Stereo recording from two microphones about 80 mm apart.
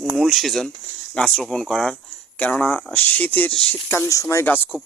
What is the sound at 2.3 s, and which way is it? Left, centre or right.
Speech, centre.